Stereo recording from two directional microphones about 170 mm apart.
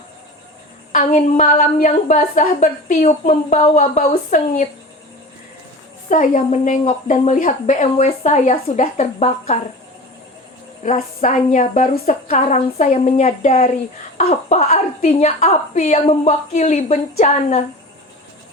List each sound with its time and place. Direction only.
0.9 s a woman's voice: 50° left (ahead or behind)
6.1 s a woman's voice: 50° left (ahead or behind)
10.8 s a woman's voice: 45° left (ahead or behind)